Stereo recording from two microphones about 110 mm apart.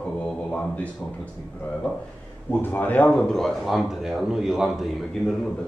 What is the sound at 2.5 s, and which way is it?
Speech, 15° left (ahead or behind).